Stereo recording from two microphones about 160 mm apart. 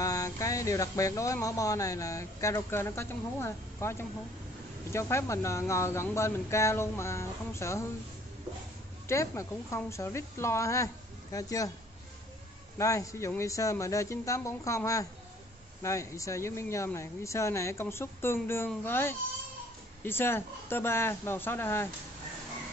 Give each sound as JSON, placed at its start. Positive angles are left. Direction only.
{"t": 0.0, "sound": "speech", "side_deg": 20}
{"t": 9.0, "sound": "speech", "side_deg": 15}
{"t": 12.7, "sound": "speech", "side_deg": 20}